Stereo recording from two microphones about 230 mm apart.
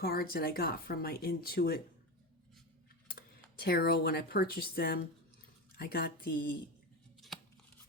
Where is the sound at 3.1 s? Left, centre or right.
Left.